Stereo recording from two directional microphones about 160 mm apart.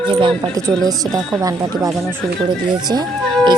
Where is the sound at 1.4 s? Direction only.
20° right (ahead or behind).